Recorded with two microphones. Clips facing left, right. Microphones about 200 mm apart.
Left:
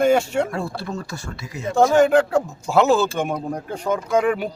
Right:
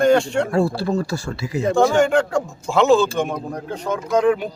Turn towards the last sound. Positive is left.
turn(degrees=10)  # may be behind; listen again after turning